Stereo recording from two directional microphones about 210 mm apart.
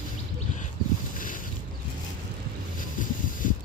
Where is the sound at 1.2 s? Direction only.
40° left (ahead or behind).